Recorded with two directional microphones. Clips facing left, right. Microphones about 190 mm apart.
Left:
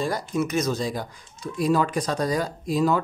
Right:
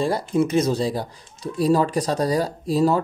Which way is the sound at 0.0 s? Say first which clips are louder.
Right 5 dB; 30° right (ahead or behind).